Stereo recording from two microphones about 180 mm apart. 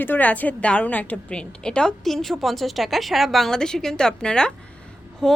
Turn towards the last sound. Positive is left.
turn(degrees=5)  # may be behind; listen again after turning